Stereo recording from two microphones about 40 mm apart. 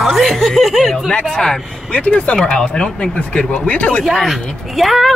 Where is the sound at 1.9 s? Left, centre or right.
Left.